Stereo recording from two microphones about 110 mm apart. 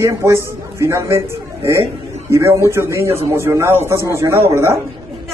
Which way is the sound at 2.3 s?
25° right (ahead or behind).